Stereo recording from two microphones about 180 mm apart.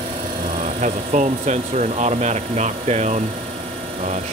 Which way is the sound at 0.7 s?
40° right (ahead or behind).